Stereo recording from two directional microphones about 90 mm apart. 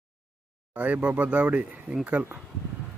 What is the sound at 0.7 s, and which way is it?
Speech, 15° right (ahead or behind).